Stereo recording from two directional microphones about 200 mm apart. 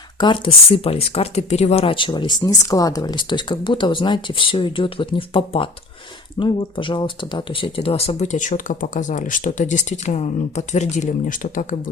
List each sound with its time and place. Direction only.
0.2 s speech: 25° left (ahead or behind)